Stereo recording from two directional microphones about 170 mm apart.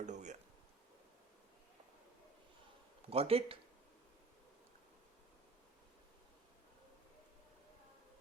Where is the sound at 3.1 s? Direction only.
35° right (ahead or behind).